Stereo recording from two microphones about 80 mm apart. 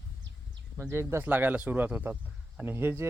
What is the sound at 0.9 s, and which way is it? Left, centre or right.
Speech, right.